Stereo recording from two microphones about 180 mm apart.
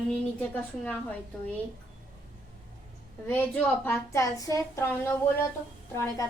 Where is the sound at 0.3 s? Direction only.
10° left (ahead or behind).